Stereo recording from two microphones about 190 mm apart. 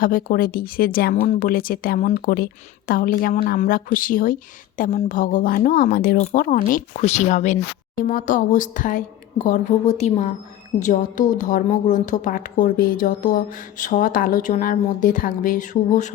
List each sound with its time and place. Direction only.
0.0 s a woman's voice: 45° left (ahead or behind)